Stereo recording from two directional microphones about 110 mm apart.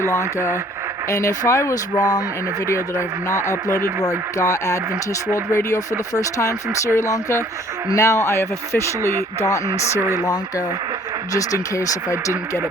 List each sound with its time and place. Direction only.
0.1 s a man's voice: 25° left (ahead or behind)
3.4 s speech: 20° right (ahead or behind)
4.4 s a man's voice: 30° left (ahead or behind)
11.3 s speech: 30° left (ahead or behind)
12.1 s speech: 20° right (ahead or behind)